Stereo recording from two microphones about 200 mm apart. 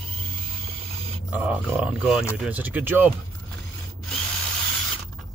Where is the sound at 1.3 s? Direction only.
10° right (ahead or behind).